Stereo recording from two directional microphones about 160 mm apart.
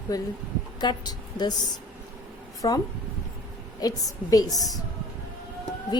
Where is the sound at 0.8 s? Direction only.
25° left (ahead or behind).